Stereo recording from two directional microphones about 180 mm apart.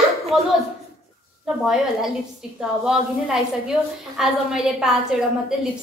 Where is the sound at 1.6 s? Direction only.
Centre (ahead or behind).